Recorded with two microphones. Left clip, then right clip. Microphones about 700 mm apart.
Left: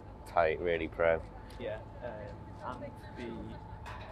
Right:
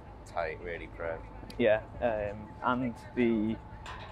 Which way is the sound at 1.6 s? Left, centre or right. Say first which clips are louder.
Right 14 dB; right.